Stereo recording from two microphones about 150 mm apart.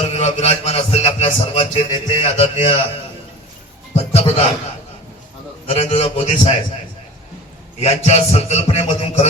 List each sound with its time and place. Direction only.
0.1 s music: 45° left (ahead or behind)
3.9 s music: 45° left (ahead or behind)
5.6 s a man's voice: 45° left (ahead or behind)
7.8 s a man's voice: 45° left (ahead or behind)